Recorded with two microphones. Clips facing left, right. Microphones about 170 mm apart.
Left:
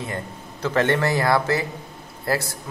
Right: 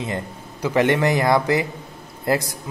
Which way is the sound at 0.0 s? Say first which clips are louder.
Right 3 dB; 15° right (ahead or behind).